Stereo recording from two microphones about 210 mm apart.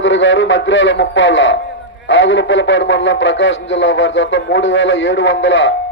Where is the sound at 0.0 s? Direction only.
60° left (ahead or behind).